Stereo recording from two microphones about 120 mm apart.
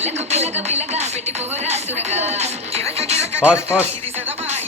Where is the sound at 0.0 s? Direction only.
65° right (ahead or behind).